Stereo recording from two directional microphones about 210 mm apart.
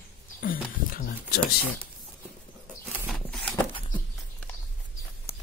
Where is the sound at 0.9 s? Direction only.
45° left (ahead or behind).